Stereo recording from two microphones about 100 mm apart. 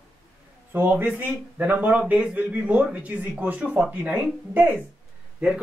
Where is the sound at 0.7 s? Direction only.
20° right (ahead or behind).